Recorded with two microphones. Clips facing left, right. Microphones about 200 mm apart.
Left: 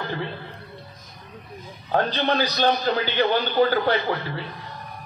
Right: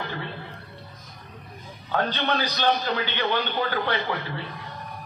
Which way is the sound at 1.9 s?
35° left (ahead or behind).